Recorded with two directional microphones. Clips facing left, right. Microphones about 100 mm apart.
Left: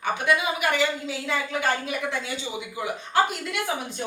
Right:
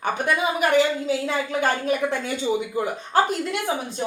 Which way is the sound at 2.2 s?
45° right (ahead or behind).